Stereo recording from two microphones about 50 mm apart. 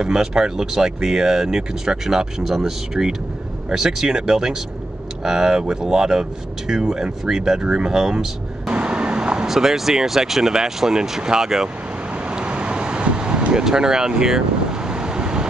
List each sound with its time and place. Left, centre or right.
0.0 s speech: centre
9.5 s speech: centre
12.3 s vehicle: right